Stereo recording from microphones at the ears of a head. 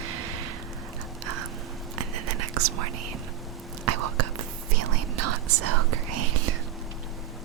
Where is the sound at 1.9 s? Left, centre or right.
Right.